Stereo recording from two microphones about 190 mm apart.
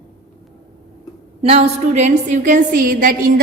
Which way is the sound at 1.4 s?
35° right (ahead or behind).